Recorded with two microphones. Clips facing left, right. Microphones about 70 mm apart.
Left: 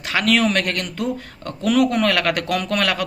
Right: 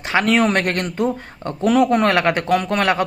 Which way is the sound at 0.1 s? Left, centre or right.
Right.